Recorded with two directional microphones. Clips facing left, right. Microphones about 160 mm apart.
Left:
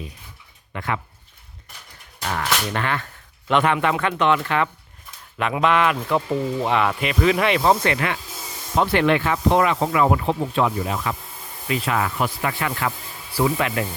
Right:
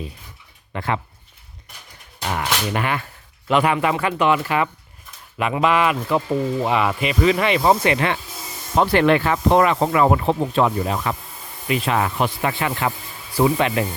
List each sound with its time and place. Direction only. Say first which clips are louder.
0.7 s speech: right 3 dB; 30° right (ahead or behind)
2.2 s speech: right 1 dB; 15° right (ahead or behind)
7.9 s speech: right 3 dB; 25° right (ahead or behind)
8.8 s speech: right 3 dB; 40° right (ahead or behind)
11.7 s speech: right 2 dB; 20° right (ahead or behind)